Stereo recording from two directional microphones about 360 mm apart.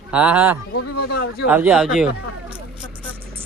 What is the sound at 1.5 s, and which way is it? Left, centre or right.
Speech, centre.